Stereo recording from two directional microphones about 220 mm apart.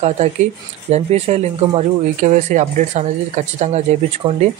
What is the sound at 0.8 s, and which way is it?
Speech, 30° right (ahead or behind).